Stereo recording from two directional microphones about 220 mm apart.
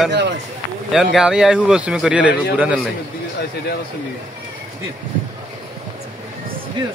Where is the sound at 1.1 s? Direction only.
5° right (ahead or behind).